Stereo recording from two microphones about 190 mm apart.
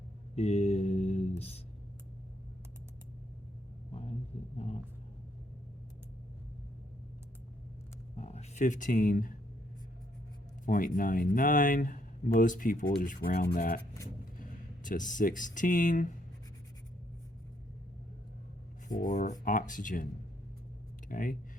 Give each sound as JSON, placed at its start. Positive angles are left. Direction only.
{"t": 0.3, "sound": "a sound", "side_deg": 35}
{"t": 4.5, "sound": "speech", "side_deg": 35}
{"t": 8.1, "sound": "speech", "side_deg": 35}
{"t": 10.7, "sound": "speech", "side_deg": 45}
{"t": 14.8, "sound": "speech", "side_deg": 45}
{"t": 18.9, "sound": "speech", "side_deg": 40}
{"t": 21.1, "sound": "speech", "side_deg": 45}